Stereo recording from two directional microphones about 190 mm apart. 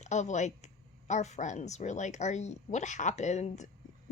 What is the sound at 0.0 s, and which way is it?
A woman's voice, 40° left (ahead or behind).